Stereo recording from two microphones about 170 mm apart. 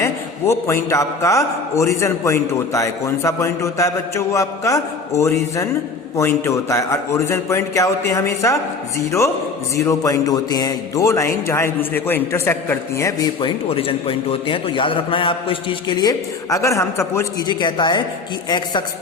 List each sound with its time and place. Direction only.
0.0 s a man's voice: 15° left (ahead or behind)
17.5 s a man's voice: 25° left (ahead or behind)